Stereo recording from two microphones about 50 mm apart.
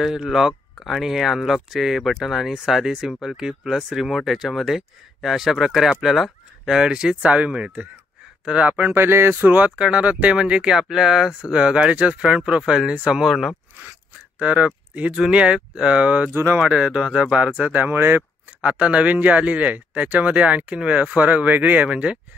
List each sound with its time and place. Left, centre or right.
0.0 s speech: centre; by 8.9 s right
8.9 s a sound: right
9.8 s speech: right
10.7 s speech: centre
11.5 s speech: right
13.3 s speech: centre
14.4 s speech: right
16.3 s speech: right
16.5 s speech: right
17.9 s a sound: right
18.6 s speech: right